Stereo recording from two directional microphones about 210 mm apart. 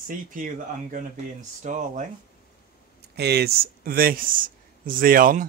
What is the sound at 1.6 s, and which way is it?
Speech, 35° right (ahead or behind).